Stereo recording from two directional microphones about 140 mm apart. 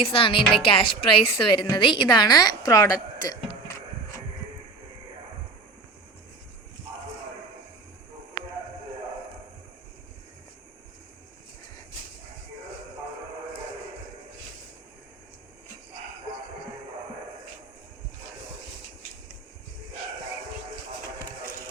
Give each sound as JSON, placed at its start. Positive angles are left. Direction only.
{"t": 0.0, "sound": "a woman's voice", "side_deg": 40}
{"t": 21.2, "sound": "music", "side_deg": 20}